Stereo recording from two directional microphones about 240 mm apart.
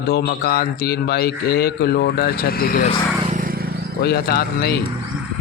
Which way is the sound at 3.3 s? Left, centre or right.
Right.